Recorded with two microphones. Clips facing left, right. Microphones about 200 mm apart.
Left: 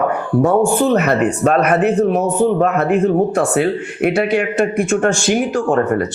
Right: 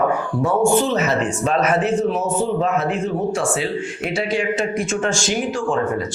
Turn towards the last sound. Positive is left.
turn(degrees=65)  # may be behind; listen again after turning